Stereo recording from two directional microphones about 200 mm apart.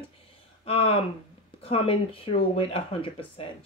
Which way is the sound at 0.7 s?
30° left (ahead or behind).